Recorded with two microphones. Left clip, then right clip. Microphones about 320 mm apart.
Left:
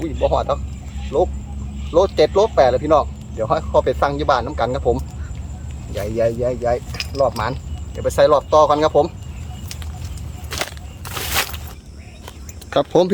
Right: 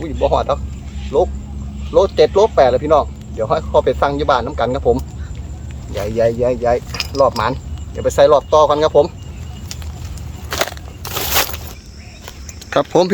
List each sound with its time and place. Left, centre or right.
0.2 s speech: centre
6.9 s keys jangling: centre
7.2 s speech: centre
10.5 s crushing: centre
11.0 s a sound: right
12.7 s speech: centre